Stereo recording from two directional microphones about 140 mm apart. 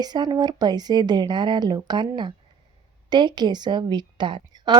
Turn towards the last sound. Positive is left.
turn(degrees=-35)  # may be behind; listen again after turning